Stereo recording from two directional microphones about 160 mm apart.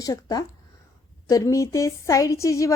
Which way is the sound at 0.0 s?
25° left (ahead or behind).